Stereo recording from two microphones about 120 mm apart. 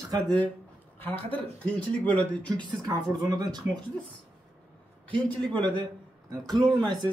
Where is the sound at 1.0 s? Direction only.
15° left (ahead or behind).